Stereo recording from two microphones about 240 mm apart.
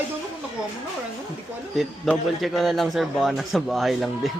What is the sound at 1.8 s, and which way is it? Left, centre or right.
A man's voice, centre.